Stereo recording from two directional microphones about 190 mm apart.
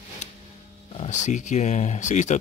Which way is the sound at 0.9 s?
35° left (ahead or behind).